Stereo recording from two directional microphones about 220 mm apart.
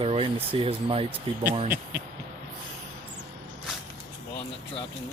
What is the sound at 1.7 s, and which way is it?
Speech, 10° right (ahead or behind).